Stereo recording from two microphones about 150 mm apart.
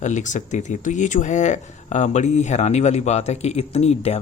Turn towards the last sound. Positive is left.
turn(degrees=45)  # may be behind; listen again after turning